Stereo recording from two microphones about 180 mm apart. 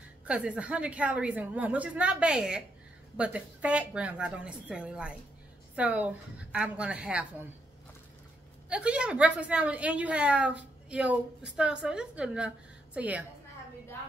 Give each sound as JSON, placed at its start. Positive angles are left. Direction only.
{"t": 0.2, "sound": "a woman's voice", "side_deg": -5}
{"t": 8.6, "sound": "a woman's voice", "side_deg": -5}